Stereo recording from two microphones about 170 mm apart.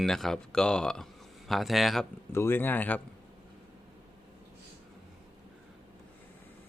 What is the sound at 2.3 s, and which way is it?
Speech, 15° left (ahead or behind).